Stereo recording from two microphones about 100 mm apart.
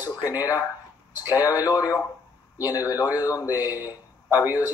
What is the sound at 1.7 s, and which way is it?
Speech, 15° right (ahead or behind).